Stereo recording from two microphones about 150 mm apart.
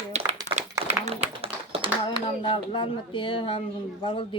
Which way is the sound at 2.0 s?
35° left (ahead or behind).